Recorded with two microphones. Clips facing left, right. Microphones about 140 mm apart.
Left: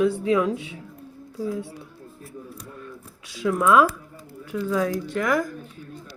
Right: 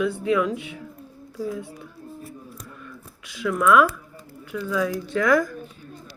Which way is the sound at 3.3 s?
35° left (ahead or behind).